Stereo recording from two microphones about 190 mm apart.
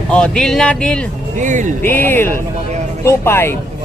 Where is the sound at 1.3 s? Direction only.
40° right (ahead or behind).